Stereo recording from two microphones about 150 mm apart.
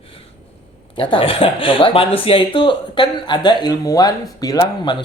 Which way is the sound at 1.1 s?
40° left (ahead or behind).